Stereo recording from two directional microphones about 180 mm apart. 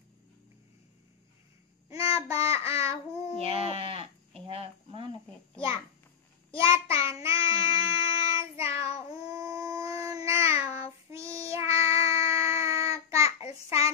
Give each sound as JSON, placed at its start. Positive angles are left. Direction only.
{"t": 2.0, "sound": "child singing", "side_deg": 30}
{"t": 3.3, "sound": "livestock", "side_deg": -35}
{"t": 6.5, "sound": "child singing", "side_deg": 30}
{"t": 7.5, "sound": "a sound", "side_deg": -15}
{"t": 8.7, "sound": "child singing", "side_deg": 35}
{"t": 9.1, "sound": "dog", "side_deg": -20}
{"t": 10.6, "sound": "child singing", "side_deg": 35}
{"t": 11.1, "sound": "child singing", "side_deg": -15}
{"t": 13.7, "sound": "a sound", "side_deg": -15}